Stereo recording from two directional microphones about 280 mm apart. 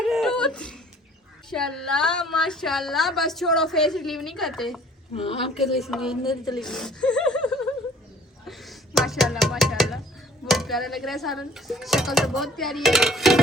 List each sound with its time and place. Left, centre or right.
0.0 s a sound: centre
1.5 s a woman's voice: centre
5.1 s a woman's voice: centre
5.5 s a woman's voice: centre